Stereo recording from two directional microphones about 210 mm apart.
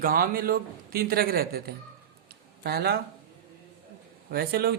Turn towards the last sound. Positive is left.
turn(degrees=-45)  # may be behind; listen again after turning